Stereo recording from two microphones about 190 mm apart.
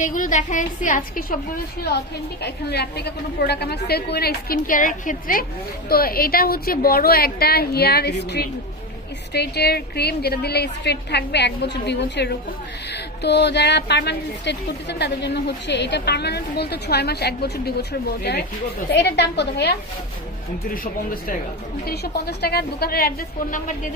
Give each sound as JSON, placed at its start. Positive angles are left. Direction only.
{"t": 0.0, "sound": "a woman's voice", "side_deg": 45}
{"t": 21.8, "sound": "speech", "side_deg": 55}